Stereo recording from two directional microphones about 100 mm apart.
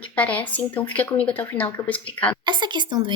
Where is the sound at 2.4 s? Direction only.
50° right (ahead or behind).